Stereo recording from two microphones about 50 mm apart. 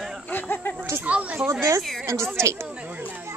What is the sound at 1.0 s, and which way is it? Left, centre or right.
Speech, right.